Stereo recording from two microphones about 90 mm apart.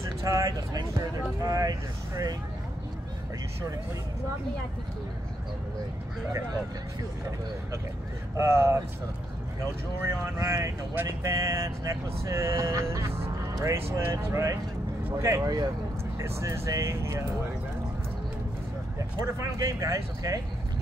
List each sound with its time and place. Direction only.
0.2 s speech: 40° right (ahead or behind)
8.4 s speech: 30° right (ahead or behind)
10.0 s speech: 35° right (ahead or behind); by 15.7 s 50° right (ahead or behind)
16.2 s speech: 30° right (ahead or behind)
19.2 s speech: 35° right (ahead or behind)